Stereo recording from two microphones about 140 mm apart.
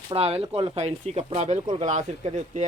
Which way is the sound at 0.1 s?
45° right (ahead or behind).